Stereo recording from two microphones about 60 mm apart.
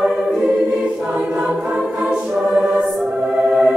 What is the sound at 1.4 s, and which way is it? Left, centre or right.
Music, centre.